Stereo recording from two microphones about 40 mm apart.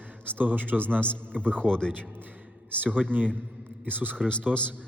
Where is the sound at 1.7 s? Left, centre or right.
Centre.